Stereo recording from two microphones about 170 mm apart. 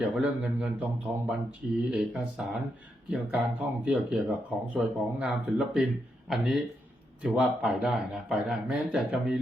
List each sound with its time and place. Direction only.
0.0 s a man's voice: 5° right (ahead or behind)